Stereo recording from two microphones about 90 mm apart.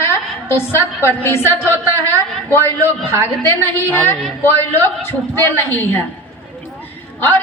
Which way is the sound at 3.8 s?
20° left (ahead or behind).